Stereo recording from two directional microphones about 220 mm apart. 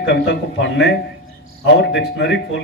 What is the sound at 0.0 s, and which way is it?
A man's voice, 50° left (ahead or behind).